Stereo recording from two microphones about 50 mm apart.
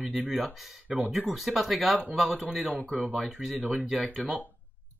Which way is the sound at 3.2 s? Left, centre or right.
Centre.